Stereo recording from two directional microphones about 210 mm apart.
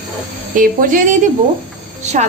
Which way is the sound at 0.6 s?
40° right (ahead or behind).